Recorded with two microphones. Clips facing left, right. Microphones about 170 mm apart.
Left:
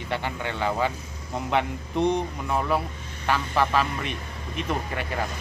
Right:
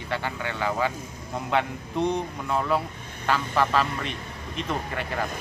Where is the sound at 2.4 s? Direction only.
15° left (ahead or behind).